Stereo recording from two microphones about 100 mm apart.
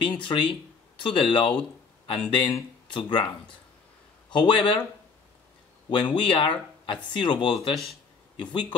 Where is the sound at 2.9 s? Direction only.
50° left (ahead or behind).